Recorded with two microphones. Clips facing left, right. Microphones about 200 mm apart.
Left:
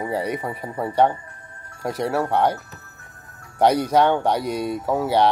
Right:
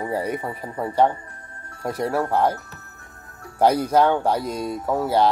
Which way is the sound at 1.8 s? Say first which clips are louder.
Even; centre (ahead or behind).